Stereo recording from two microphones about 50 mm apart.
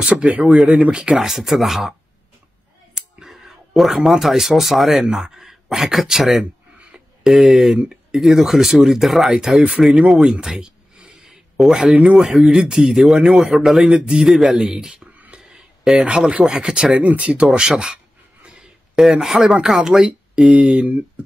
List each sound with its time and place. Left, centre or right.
0.0 s speech: right
1.1 s speech: centre
7.5 s a man's voice: centre
9.6 s speech: centre
9.8 s a man's voice: centre
11.2 s a sound: centre
12.1 s a man's voice: centre
13.7 s speech: centre
14.2 s a man's voice: centre
15.0 s whispering: right
15.5 s a sound: centre
16.3 s a man's voice: centre
17.0 s speech: right
17.5 s a man's voice: centre